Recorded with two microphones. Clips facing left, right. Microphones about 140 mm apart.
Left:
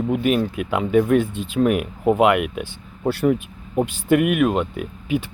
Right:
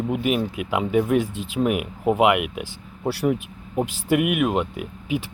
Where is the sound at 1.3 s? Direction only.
90° right.